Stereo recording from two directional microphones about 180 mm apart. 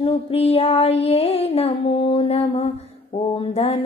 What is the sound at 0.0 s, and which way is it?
Female singing, 35° left (ahead or behind).